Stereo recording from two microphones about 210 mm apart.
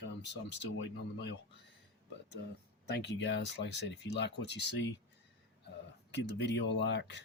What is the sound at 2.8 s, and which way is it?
Speech, 55° left (ahead or behind).